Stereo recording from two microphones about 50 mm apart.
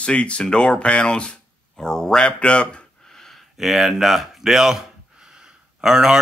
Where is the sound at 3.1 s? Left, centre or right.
Centre.